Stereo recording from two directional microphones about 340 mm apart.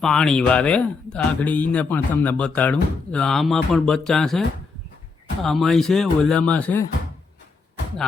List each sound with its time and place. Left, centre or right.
0.0 s speech: centre